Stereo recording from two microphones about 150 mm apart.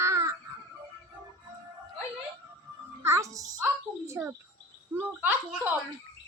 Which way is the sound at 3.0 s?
20° right (ahead or behind).